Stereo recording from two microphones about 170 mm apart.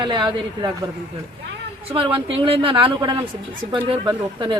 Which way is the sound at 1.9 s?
35° right (ahead or behind).